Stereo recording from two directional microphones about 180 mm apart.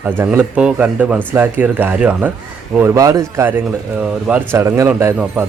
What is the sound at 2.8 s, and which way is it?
Speech, 20° right (ahead or behind).